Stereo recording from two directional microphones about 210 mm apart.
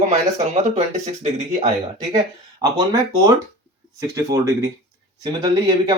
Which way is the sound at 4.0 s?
15° right (ahead or behind).